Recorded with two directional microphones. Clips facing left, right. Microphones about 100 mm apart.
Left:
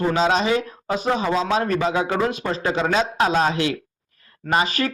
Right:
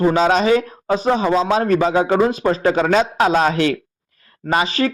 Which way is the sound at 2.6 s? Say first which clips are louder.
Right 4 dB; 45° right (ahead or behind).